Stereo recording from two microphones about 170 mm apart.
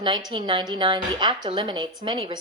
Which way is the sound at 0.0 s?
25° right (ahead or behind).